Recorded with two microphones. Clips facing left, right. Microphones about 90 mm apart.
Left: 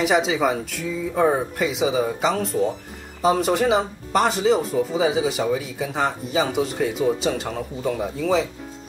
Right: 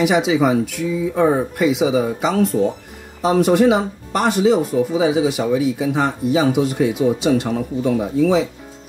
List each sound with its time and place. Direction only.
0.0 s speech: centre (ahead or behind)